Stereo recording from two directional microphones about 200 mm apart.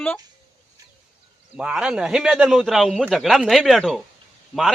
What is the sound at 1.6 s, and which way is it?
A man's voice, 5° right (ahead or behind).